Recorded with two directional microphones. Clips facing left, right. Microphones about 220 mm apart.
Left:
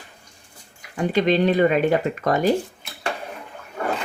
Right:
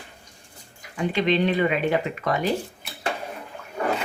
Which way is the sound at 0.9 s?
40° left (ahead or behind).